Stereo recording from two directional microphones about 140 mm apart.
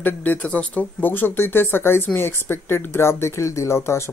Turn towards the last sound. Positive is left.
turn(degrees=20)  # may be behind; listen again after turning